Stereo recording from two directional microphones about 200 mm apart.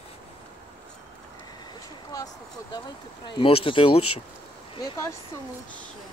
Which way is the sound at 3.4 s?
25° left (ahead or behind).